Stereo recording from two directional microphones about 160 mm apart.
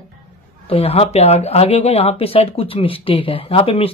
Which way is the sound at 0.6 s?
40° left (ahead or behind).